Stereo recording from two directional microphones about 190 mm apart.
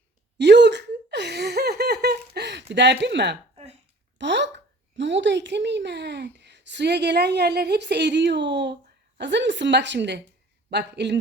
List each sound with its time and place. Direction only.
0.3 s gasp: 65° right (ahead or behind)
3.5 s a sound: 35° right (ahead or behind)
4.2 s speech: 65° right (ahead or behind)